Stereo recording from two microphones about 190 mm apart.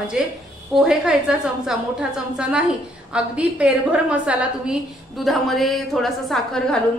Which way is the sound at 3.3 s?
5° right (ahead or behind).